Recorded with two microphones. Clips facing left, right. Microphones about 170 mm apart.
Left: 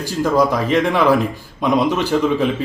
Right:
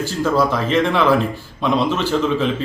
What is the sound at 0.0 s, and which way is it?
A man's voice, 15° left (ahead or behind).